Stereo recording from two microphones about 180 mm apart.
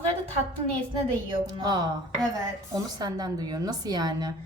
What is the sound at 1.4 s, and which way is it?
A woman's voice, 25° right (ahead or behind).